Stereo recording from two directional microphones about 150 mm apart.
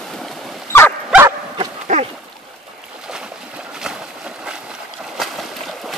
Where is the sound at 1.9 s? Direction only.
55° right (ahead or behind).